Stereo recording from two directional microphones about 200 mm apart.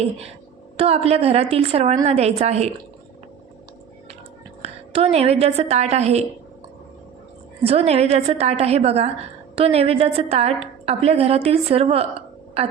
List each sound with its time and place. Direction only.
0.8 s a woman's voice: 30° right (ahead or behind)
4.6 s a woman's voice: 30° right (ahead or behind)
7.6 s a woman's voice: 30° right (ahead or behind)